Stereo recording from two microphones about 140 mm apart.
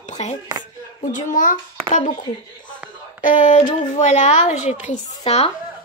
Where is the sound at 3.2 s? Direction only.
70° left (ahead or behind).